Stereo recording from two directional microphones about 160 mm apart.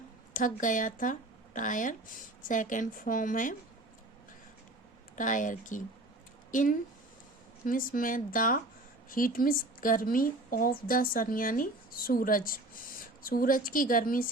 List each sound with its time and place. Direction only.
0.3 s a woman's voice: 55° left (ahead or behind)
5.1 s a woman's voice: 55° left (ahead or behind)